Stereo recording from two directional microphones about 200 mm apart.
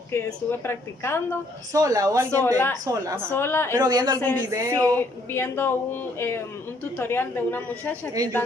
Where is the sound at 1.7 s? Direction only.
15° right (ahead or behind).